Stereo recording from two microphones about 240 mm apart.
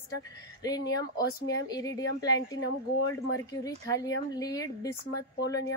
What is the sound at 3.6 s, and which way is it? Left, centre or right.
Speech, centre.